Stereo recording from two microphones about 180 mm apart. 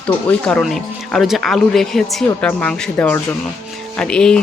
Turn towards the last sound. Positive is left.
turn(degrees=5)  # may be behind; listen again after turning